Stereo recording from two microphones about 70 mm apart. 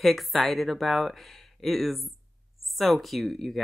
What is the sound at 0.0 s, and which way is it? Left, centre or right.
Speech, centre.